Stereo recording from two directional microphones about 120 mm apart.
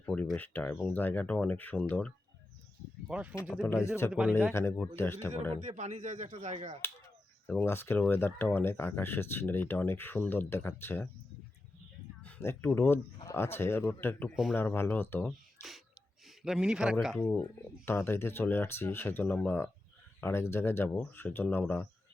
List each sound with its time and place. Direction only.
0.0 s a sound: 10° left (ahead or behind)
0.3 s speech: 15° left (ahead or behind)
3.1 s speech: 10° right (ahead or behind)
3.6 s speech: 25° left (ahead or behind)
4.1 s speech: 10° right (ahead or behind)
4.5 s speech: 20° left (ahead or behind)
5.6 s speech: 80° right
7.4 s speech: 20° left (ahead or behind)
12.4 s speech: 20° left (ahead or behind)
15.3 s speech: centre (ahead or behind)
17.2 s speech: 10° left (ahead or behind)
17.8 s speech: 20° left (ahead or behind)